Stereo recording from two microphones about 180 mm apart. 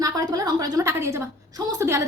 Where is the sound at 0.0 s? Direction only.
20° right (ahead or behind).